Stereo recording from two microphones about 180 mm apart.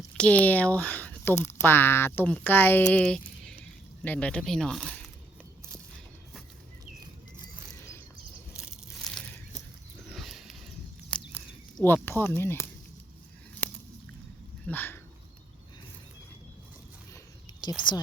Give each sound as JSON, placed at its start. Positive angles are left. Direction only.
{"t": 0.2, "sound": "speech", "side_deg": 10}
{"t": 8.5, "sound": "a sound", "side_deg": 0}
{"t": 11.3, "sound": "a sound", "side_deg": 10}
{"t": 12.2, "sound": "speech", "side_deg": 15}
{"t": 14.7, "sound": "speech", "side_deg": 10}
{"t": 17.6, "sound": "speech", "side_deg": 20}